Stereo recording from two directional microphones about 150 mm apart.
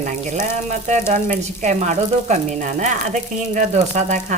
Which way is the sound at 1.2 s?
55° right (ahead or behind).